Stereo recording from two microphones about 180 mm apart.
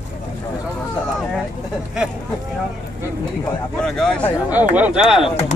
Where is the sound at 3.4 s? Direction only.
5° left (ahead or behind).